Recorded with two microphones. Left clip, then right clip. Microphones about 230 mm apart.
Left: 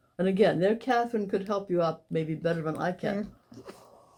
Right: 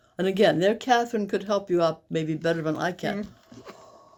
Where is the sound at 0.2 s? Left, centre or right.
Right.